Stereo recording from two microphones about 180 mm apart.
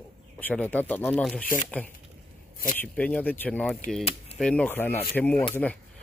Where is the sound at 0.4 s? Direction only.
10° left (ahead or behind).